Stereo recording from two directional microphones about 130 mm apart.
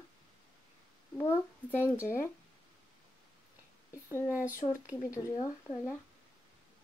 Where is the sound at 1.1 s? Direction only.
20° left (ahead or behind).